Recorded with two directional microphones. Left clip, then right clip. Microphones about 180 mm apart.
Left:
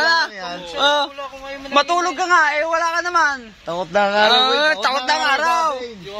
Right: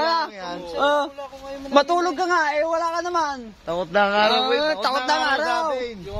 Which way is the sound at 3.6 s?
60° left (ahead or behind).